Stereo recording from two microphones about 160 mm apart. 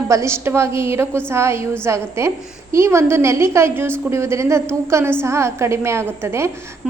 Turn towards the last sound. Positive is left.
turn(degrees=-15)  # may be behind; listen again after turning